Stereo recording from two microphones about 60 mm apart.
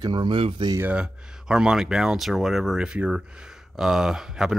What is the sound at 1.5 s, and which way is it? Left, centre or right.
Speech, centre.